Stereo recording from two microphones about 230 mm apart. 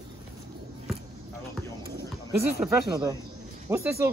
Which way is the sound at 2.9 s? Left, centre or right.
Centre.